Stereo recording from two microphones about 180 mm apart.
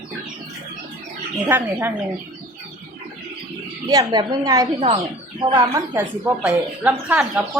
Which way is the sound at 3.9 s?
20° right (ahead or behind).